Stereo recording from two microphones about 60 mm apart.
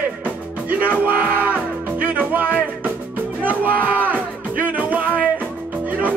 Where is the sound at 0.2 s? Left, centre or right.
Right.